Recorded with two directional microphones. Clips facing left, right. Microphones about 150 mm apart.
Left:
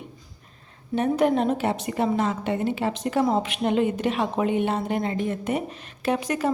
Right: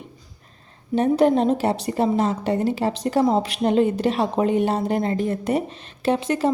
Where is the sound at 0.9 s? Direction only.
30° right (ahead or behind).